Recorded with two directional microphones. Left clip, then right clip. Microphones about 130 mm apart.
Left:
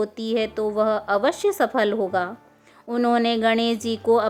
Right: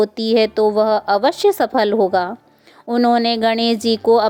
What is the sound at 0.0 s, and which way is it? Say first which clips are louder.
A woman's voice: right 9 dB; 40° right (ahead or behind).